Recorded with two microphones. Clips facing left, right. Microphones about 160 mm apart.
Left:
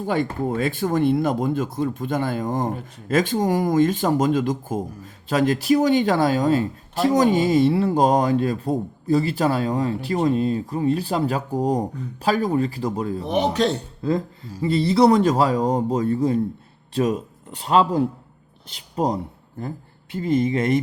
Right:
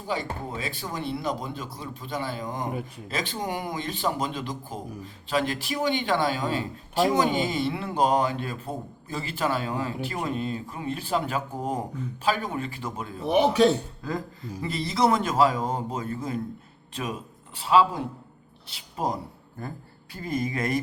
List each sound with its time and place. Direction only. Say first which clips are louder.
0.1 s speech: left 7 dB; 50° left (ahead or behind); by 13.2 s 35° left (ahead or behind)
13.2 s a man's voice: right 2 dB; 10° right (ahead or behind)
14.6 s speech: left 8 dB; 30° left (ahead or behind)